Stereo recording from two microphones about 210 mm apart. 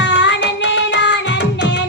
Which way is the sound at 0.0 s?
60° left (ahead or behind).